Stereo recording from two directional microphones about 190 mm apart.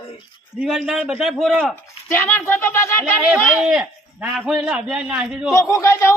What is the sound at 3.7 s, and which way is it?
Speech, 5° right (ahead or behind).